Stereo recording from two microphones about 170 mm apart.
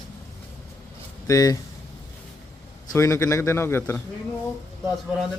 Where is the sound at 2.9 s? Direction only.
20° left (ahead or behind).